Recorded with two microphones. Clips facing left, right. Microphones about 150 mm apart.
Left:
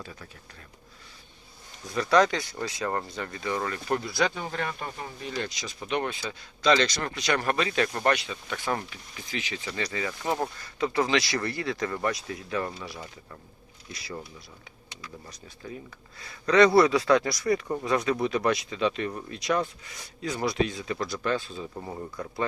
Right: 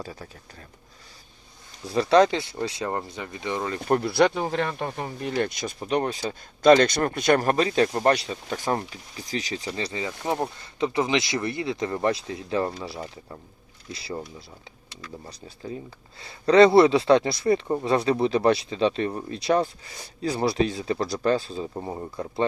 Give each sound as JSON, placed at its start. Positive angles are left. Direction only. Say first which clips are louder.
{"t": 0.0, "sound": "speech", "louder": "right 6 dB", "side_deg": -35}
{"t": 1.8, "sound": "speech", "louder": "right 4 dB", "side_deg": -30}
{"t": 2.9, "sound": "speech", "louder": "right 1 dB", "side_deg": -10}
{"t": 4.0, "sound": "speech", "louder": "right 7 dB", "side_deg": -65}
{"t": 5.8, "sound": "speech", "louder": "right 4 dB", "side_deg": -35}
{"t": 9.6, "sound": "speech", "louder": "right 2 dB", "side_deg": -25}